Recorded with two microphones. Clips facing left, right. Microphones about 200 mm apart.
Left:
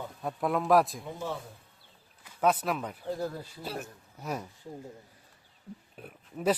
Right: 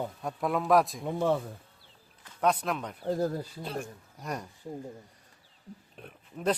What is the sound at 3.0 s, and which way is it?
Speech, 40° right (ahead or behind).